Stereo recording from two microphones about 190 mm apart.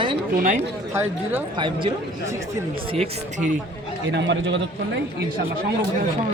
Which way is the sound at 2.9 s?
30° right (ahead or behind).